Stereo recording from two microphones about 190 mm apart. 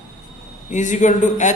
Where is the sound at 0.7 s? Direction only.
40° left (ahead or behind).